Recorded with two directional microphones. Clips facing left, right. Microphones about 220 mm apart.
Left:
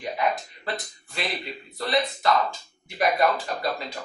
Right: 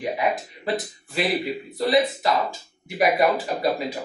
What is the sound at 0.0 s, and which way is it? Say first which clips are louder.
Speech: right 2 dB; 10° right (ahead or behind).